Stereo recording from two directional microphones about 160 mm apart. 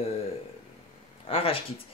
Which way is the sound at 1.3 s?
35° left (ahead or behind).